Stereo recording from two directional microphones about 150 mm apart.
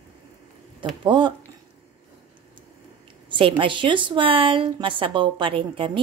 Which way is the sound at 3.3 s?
35° right (ahead or behind).